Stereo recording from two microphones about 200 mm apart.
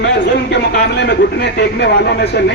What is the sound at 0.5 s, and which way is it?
Speech, 55° left (ahead or behind).